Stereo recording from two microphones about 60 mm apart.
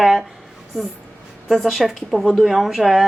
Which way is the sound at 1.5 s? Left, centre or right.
Centre.